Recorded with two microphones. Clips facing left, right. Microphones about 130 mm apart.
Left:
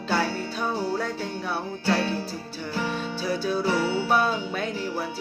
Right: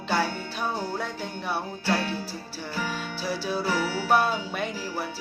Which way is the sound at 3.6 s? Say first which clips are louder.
Left 3 dB; 25° left (ahead or behind).